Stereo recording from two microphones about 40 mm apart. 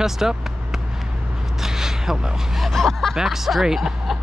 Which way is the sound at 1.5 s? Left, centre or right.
Centre.